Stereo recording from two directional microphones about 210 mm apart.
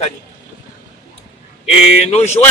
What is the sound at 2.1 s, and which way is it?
Speech, 30° left (ahead or behind).